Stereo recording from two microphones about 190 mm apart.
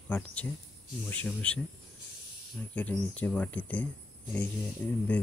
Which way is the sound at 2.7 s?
5° left (ahead or behind).